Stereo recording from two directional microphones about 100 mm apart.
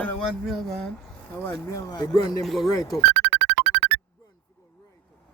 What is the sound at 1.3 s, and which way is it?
Speech, 25° left (ahead or behind).